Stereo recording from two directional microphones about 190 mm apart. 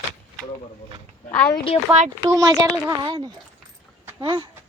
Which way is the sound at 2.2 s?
20° right (ahead or behind).